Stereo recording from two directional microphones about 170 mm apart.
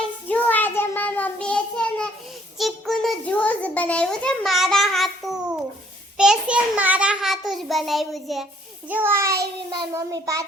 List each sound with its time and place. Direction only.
0.0 s child singing: 10° left (ahead or behind)
2.6 s a sound: centre (ahead or behind)
6.1 s a child's voice: 5° right (ahead or behind)
8.9 s child singing: 10° right (ahead or behind)